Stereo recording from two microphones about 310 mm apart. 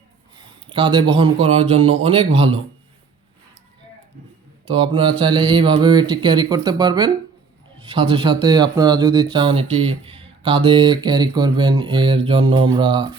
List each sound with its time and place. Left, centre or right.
0.7 s speech: centre
4.7 s speech: centre
8.1 s speech: centre